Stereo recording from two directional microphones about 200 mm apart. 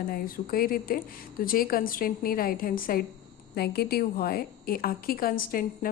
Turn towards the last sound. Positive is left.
turn(degrees=45)  # may be behind; listen again after turning